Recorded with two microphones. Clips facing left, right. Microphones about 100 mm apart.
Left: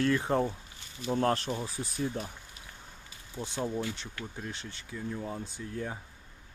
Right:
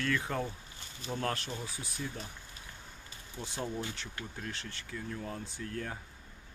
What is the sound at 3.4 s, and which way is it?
Speech, 25° left (ahead or behind).